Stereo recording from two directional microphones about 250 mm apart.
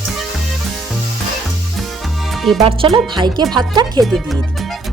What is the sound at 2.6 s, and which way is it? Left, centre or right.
Speech, right.